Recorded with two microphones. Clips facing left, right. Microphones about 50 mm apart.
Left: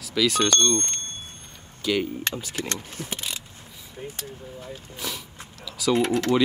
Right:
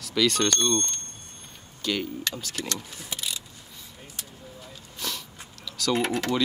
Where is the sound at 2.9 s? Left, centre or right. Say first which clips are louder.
Left 2 dB; left.